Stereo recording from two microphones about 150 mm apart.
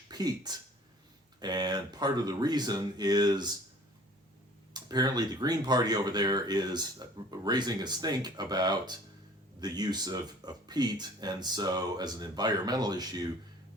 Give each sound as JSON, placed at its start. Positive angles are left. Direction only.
{"t": 0.1, "sound": "speech", "side_deg": -25}
{"t": 4.7, "sound": "speech", "side_deg": -25}